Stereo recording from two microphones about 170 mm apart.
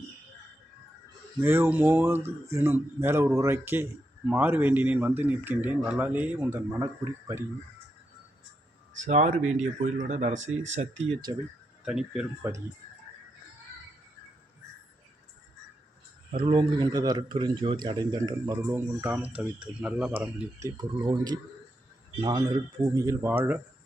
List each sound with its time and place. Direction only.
1.4 s speech: 15° right (ahead or behind)
9.0 s speech: 45° right (ahead or behind)
11.9 s speech: 5° right (ahead or behind)
12.4 s speech: 15° right (ahead or behind)
16.3 s a man's voice: 30° right (ahead or behind); by 23.6 s 10° right (ahead or behind)